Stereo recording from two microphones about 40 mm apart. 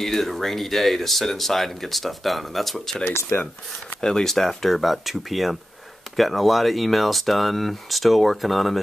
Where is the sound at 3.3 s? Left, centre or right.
Left.